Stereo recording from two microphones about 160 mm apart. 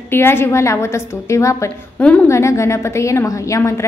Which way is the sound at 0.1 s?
15° left (ahead or behind).